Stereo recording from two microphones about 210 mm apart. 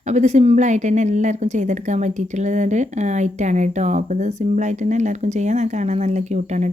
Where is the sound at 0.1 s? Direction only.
35° right (ahead or behind).